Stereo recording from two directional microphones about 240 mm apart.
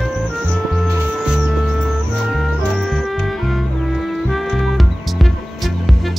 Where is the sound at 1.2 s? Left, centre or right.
Centre.